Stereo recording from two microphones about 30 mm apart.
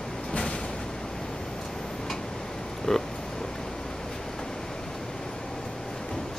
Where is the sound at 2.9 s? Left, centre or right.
Left.